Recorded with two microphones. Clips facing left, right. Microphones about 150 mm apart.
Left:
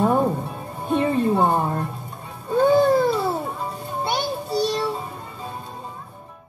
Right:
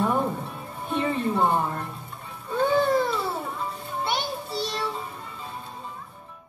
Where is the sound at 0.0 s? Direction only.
40° left (ahead or behind).